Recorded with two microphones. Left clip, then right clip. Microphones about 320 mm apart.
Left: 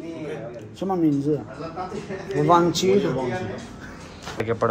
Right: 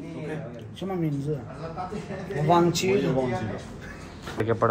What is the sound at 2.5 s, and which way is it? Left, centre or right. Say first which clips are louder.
Speech: left 3 dB; centre.